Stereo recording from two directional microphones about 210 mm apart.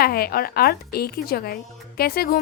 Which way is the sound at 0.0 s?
45° left (ahead or behind).